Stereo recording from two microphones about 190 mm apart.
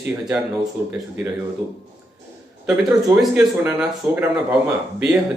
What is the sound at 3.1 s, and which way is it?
Speech, 10° right (ahead or behind).